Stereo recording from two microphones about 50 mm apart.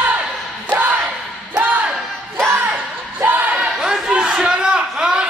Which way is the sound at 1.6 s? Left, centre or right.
Right.